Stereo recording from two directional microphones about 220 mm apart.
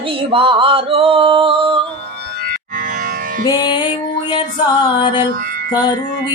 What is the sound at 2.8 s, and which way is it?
Music, 35° right (ahead or behind).